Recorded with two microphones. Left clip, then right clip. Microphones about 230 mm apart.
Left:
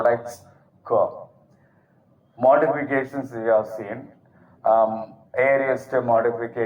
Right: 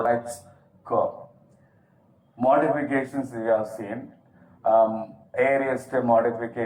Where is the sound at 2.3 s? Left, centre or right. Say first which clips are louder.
Left 3 dB; left.